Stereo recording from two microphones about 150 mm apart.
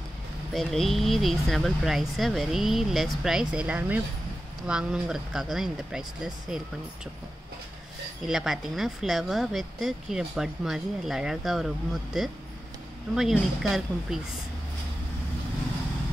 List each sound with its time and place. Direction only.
0.5 s speech: centre (ahead or behind)
8.2 s speech: centre (ahead or behind)